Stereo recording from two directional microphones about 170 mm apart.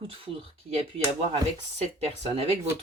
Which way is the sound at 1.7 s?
40° right (ahead or behind).